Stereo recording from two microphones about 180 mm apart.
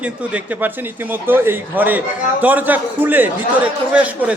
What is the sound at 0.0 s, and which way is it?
A man's voice, 5° right (ahead or behind).